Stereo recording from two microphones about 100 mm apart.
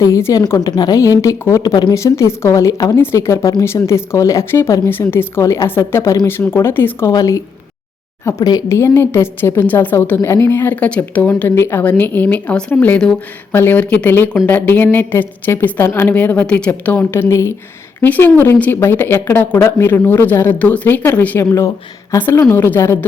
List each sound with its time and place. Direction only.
0.0 s a woman's voice: 30° left (ahead or behind)
7.1 s a woman's voice: 35° left (ahead or behind); by 21.4 s 20° left (ahead or behind)
22.5 s speech: 25° left (ahead or behind)